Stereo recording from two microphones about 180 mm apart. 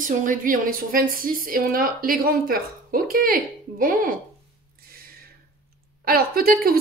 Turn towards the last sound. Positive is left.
turn(degrees=-55)  # may be behind; listen again after turning